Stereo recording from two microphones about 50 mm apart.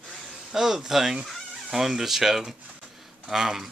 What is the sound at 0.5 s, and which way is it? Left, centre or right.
Speech, centre.